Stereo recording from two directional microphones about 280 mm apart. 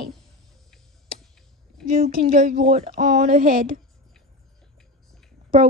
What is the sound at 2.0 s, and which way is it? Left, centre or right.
Speech, right.